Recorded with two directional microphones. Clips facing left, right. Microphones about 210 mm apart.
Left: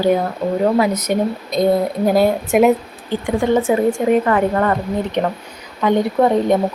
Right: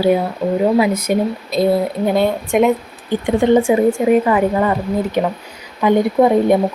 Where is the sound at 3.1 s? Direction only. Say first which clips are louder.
Right 3 dB; 20° right (ahead or behind).